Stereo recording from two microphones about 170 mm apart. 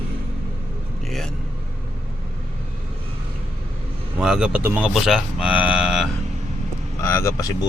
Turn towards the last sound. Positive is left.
turn(degrees=20)  # may be behind; listen again after turning